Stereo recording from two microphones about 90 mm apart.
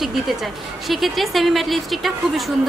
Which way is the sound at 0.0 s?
Centre (ahead or behind).